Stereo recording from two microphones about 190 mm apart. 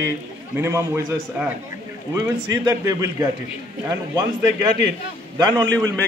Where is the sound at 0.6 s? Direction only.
15° right (ahead or behind).